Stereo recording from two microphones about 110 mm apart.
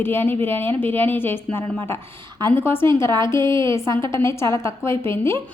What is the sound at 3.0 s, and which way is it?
Speech, 45° right (ahead or behind).